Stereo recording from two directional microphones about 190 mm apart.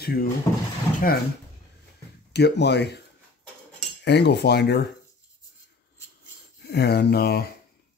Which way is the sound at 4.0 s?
65° left (ahead or behind).